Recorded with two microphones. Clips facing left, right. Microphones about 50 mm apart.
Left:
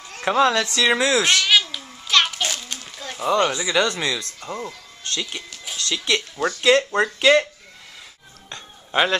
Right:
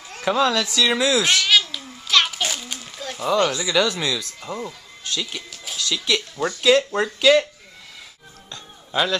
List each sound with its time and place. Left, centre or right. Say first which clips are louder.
0.2 s speech: left 2 dB; centre
1.0 s babbling: even; centre
3.8 s speech: even; centre
4.2 s music: even; centre
5.9 s speech: even; centre
8.5 s music: left 2 dB; left